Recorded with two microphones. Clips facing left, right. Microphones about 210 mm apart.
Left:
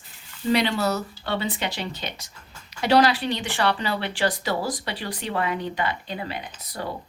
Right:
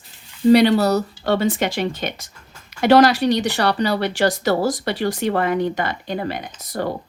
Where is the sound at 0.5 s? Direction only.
35° right (ahead or behind).